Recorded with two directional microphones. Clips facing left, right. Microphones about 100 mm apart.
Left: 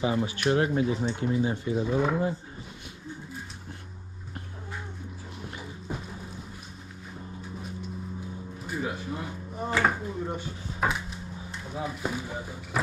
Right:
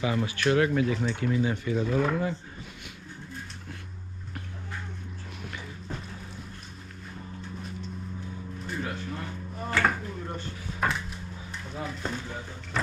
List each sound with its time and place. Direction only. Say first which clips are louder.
0.0 s speech: left 1 dB; 25° left (ahead or behind)
1.9 s speech: left 1 dB; 10° left (ahead or behind)
5.9 s a sound: left 3 dB; 10° left (ahead or behind)
8.6 s a sound: left 2 dB; 10° left (ahead or behind)
9.9 s dishes: left 3 dB; 10° left (ahead or behind)
11.5 s speech: left 2 dB; 10° left (ahead or behind)